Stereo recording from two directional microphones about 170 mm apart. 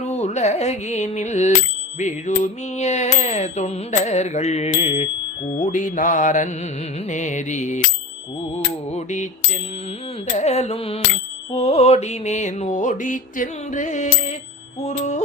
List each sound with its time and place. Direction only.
0.0 s music: 40° left (ahead or behind)
2.4 s carnatic music: 40° left (ahead or behind)
5.5 s music: 50° left (ahead or behind)
8.5 s mantra: 40° left (ahead or behind)
10.3 s carnatic music: 40° left (ahead or behind)
11.5 s music: 40° left (ahead or behind)